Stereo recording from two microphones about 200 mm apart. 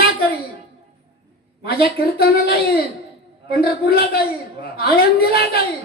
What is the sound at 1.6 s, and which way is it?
A woman's voice, 50° left (ahead or behind).